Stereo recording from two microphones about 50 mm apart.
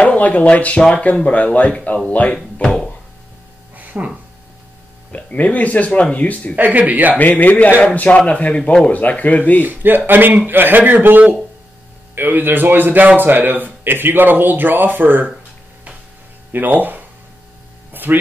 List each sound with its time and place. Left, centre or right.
0.0 s speech: left
2.3 s speech: centre
3.7 s music: right
5.1 s speech: left
6.5 s speech: right
7.2 s a man's voice: left
9.6 s speech: right
16.5 s speech: right